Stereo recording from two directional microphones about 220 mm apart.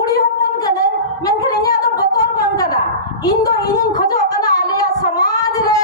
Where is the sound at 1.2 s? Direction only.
15° left (ahead or behind).